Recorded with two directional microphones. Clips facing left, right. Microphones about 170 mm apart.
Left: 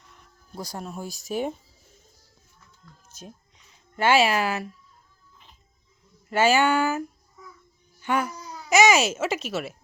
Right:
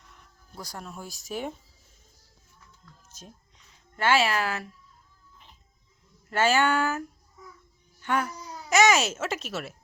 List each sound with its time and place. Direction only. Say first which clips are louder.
0.8 s speech: left 5 dB; 25° left (ahead or behind)
1.0 s speech: left 6 dB; 15° left (ahead or behind)
3.9 s speech: left 4 dB; 15° left (ahead or behind)
6.3 s speech: left 3 dB; 5° left (ahead or behind)
8.0 s speech: left 2 dB; 5° left (ahead or behind)